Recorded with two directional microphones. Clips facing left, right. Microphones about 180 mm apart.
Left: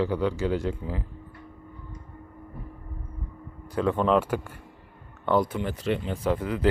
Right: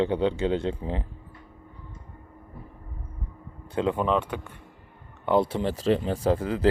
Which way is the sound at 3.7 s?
25° right (ahead or behind).